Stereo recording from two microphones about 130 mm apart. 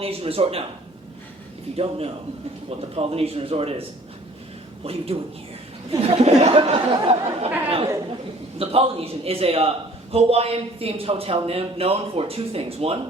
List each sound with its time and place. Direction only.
0.0 s a man's voice: 50° right (ahead or behind)
1.7 s a man's voice: 50° right (ahead or behind)
8.5 s a man's voice: 50° right (ahead or behind)